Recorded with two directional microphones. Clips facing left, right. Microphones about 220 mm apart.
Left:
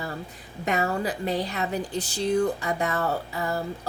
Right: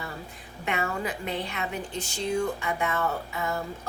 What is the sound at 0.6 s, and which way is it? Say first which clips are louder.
Speech: left 4 dB; 35° left (ahead or behind).